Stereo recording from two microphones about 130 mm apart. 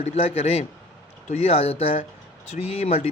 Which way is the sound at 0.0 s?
55° left (ahead or behind).